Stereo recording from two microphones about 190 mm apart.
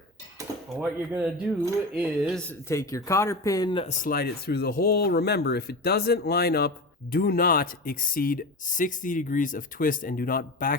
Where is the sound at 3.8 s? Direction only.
45° left (ahead or behind).